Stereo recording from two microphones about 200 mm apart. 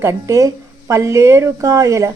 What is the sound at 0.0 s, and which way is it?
A woman's voice, 15° right (ahead or behind).